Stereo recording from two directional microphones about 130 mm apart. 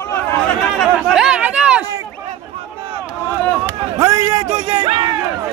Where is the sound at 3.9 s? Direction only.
20° right (ahead or behind).